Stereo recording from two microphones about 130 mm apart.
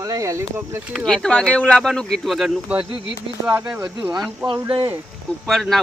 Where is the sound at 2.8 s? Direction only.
35° left (ahead or behind).